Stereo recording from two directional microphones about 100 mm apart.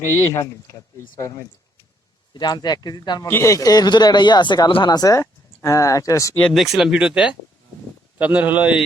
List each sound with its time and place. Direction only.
0.1 s speech: 30° left (ahead or behind)
2.3 s speech: 45° left (ahead or behind)
3.2 s speech: 25° left (ahead or behind)
6.5 s speech: centre (ahead or behind)